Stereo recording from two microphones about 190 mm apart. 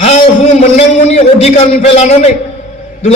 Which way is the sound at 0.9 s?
35° left (ahead or behind).